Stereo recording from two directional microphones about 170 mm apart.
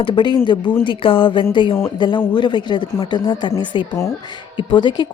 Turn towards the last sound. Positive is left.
turn(degrees=25)  # may be behind; listen again after turning